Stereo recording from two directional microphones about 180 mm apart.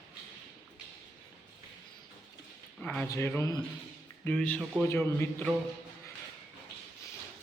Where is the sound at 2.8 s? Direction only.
10° left (ahead or behind).